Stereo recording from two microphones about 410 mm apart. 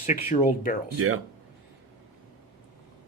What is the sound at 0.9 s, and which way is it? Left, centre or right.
Speech, right.